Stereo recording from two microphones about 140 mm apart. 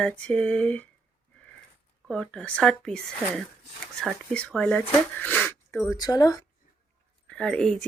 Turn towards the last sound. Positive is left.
turn(degrees=5)  # may be behind; listen again after turning